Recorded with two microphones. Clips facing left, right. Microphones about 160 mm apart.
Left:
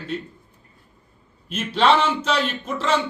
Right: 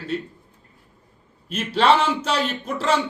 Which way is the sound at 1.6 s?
10° right (ahead or behind).